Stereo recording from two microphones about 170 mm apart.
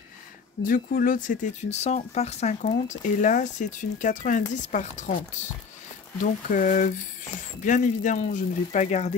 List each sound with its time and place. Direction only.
0.7 s speech: 55° left (ahead or behind)
6.1 s speech: 50° left (ahead or behind)